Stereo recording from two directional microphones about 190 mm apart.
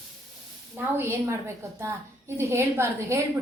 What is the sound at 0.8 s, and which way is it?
A woman's voice, 10° right (ahead or behind).